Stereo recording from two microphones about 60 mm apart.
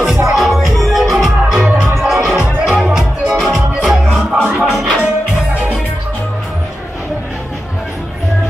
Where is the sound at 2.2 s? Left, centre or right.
Centre.